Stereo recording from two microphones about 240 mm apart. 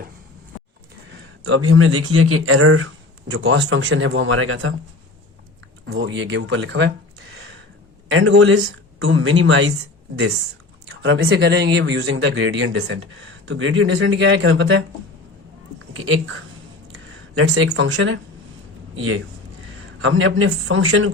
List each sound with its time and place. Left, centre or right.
1.5 s speech: right
5.8 s speech: right
8.0 s speech: right
11.0 s speech: right
15.9 s speech: right